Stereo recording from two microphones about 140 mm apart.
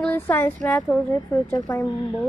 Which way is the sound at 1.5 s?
20° left (ahead or behind).